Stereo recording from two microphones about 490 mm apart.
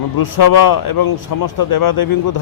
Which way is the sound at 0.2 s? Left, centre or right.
Left.